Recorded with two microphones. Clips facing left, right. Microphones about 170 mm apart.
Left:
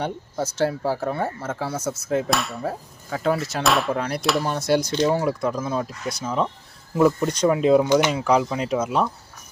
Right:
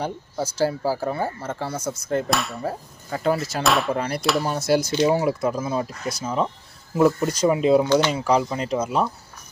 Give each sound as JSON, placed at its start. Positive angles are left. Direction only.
{"t": 0.0, "sound": "speech", "side_deg": 0}
{"t": 7.9, "sound": "speech", "side_deg": 15}
{"t": 8.1, "sound": "speech", "side_deg": 0}